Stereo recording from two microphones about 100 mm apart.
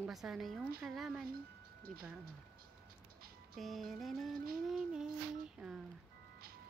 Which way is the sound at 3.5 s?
Centre (ahead or behind).